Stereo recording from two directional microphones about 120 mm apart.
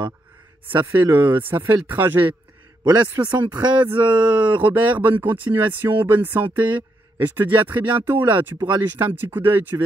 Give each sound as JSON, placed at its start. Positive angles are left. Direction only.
{"t": 0.7, "sound": "speech", "side_deg": -15}